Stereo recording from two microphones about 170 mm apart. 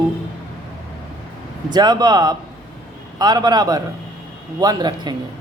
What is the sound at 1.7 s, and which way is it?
Speech, 25° right (ahead or behind).